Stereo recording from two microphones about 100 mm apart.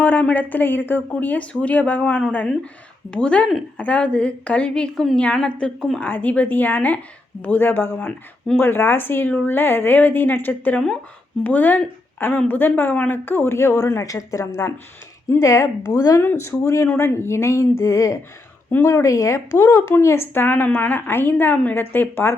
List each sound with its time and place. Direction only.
0.0 s a woman's voice: 15° left (ahead or behind); by 16.2 s 35° left (ahead or behind)
16.2 s a woman's voice: 25° left (ahead or behind)
18.7 s a woman's voice: 20° left (ahead or behind)
18.9 s a woman's voice: 35° left (ahead or behind)